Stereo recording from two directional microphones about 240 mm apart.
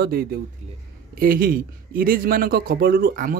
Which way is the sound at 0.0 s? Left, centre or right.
Right.